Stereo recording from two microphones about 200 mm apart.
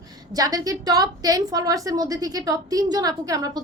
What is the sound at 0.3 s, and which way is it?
A woman's voice, 20° right (ahead or behind).